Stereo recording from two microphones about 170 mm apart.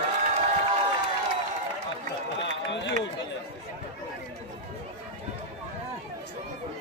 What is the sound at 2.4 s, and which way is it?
Run, 90° left.